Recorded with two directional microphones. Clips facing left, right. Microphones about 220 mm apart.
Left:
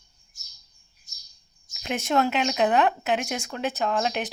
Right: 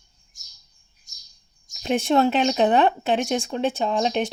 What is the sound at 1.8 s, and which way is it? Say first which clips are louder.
Speech: right 5 dB; 30° right (ahead or behind).